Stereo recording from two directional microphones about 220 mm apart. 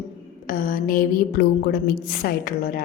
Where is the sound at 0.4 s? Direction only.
40° left (ahead or behind).